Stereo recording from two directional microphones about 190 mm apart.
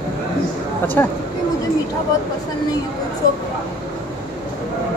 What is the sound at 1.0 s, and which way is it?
Speech, 10° left (ahead or behind).